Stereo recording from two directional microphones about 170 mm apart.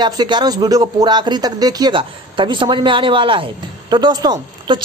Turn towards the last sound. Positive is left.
turn(degrees=-25)  # may be behind; listen again after turning